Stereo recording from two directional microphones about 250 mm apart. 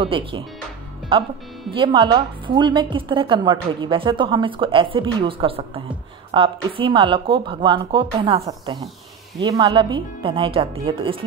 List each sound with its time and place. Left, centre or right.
0.0 s a woman's voice: right